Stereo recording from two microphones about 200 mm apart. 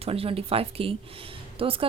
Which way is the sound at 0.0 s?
30° right (ahead or behind).